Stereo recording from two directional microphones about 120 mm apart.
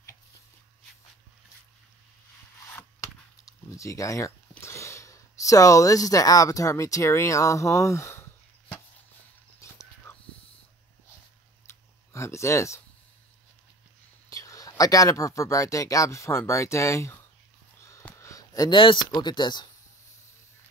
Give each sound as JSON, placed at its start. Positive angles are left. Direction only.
{"t": 2.7, "sound": "a sound", "side_deg": 25}
{"t": 9.6, "sound": "dog", "side_deg": 25}
{"t": 11.6, "sound": "clicking", "side_deg": 25}
{"t": 14.3, "sound": "speech", "side_deg": 30}
{"t": 18.1, "sound": "a sound", "side_deg": 25}
{"t": 18.7, "sound": "speech", "side_deg": 45}